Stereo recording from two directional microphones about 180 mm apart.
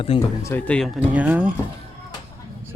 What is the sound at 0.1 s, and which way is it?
Speech, 30° left (ahead or behind).